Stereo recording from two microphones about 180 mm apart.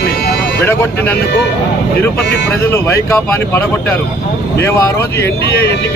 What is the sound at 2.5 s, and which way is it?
Speech, 15° left (ahead or behind).